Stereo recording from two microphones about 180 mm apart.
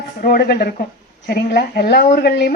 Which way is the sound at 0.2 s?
60° left (ahead or behind).